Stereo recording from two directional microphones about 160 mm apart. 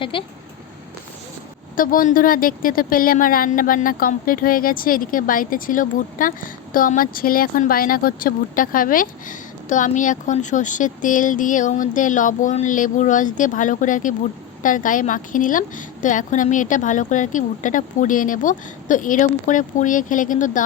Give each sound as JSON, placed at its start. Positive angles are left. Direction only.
{"t": 0.0, "sound": "speech", "side_deg": 30}
{"t": 1.7, "sound": "a woman's voice", "side_deg": 60}